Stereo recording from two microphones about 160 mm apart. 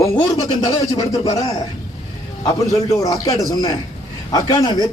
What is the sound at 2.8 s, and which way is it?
Speech, 20° left (ahead or behind).